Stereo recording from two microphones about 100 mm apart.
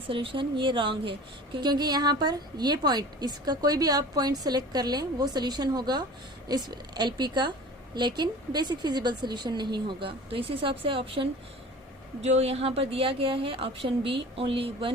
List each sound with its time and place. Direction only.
0.1 s speech: 65° right (ahead or behind)
1.5 s speech: 45° right (ahead or behind); by 11.3 s 65° right (ahead or behind)
12.2 s a woman's voice: 90° right; by 14.9 s 65° right (ahead or behind)